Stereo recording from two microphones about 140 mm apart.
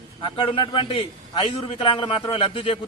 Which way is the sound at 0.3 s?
40° left (ahead or behind).